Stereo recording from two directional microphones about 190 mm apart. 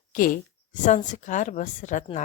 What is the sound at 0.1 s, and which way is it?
A woman's voice, 45° left (ahead or behind).